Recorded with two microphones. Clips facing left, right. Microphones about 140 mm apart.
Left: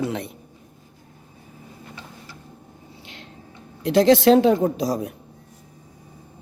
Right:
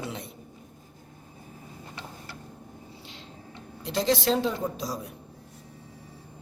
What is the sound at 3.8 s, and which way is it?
Speech, 65° left (ahead or behind).